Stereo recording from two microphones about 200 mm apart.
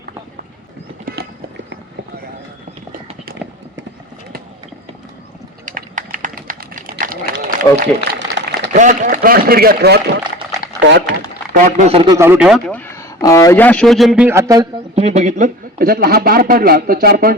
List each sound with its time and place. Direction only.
1.0 s clip-clop: 50° right (ahead or behind)
2.9 s a sound: 45° right (ahead or behind)
5.6 s typing: 40° right (ahead or behind)
7.6 s speech: 15° left (ahead or behind)
8.4 s a sound: 65° right (ahead or behind)
8.7 s a man's voice: 40° right (ahead or behind)
12.0 s speech: 15° right (ahead or behind)
14.9 s a man's voice: 35° right (ahead or behind)